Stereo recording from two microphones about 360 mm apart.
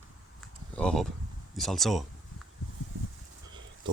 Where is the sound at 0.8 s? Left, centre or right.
Centre.